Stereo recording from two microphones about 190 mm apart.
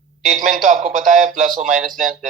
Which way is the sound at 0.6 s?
40° right (ahead or behind).